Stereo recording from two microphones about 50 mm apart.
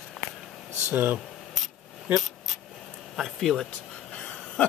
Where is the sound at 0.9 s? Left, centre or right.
Right.